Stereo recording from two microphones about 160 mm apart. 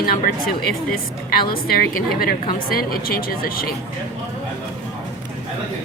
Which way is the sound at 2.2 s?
65° left (ahead or behind).